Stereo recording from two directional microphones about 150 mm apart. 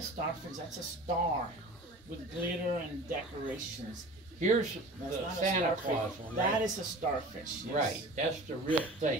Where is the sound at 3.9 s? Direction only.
55° right (ahead or behind).